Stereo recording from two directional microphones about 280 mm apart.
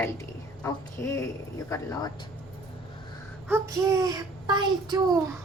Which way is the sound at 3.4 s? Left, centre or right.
Centre.